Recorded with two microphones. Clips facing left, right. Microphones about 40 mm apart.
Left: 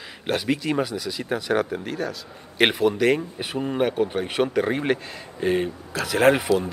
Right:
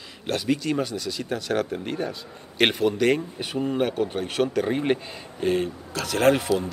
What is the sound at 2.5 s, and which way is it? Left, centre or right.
Speech, centre.